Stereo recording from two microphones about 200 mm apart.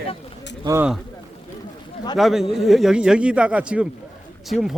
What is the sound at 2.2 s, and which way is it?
Speech, centre (ahead or behind).